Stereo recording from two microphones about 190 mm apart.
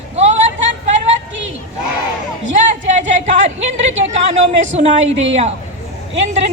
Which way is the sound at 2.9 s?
40° right (ahead or behind).